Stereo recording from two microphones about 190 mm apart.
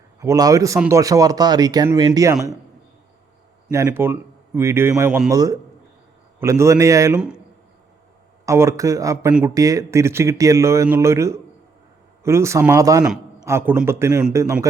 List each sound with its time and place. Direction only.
0.2 s speech: 20° right (ahead or behind)
3.7 s speech: 15° right (ahead or behind)
8.4 s speech: 15° right (ahead or behind)